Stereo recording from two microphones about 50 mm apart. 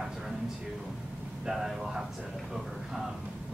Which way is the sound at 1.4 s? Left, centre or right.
Centre.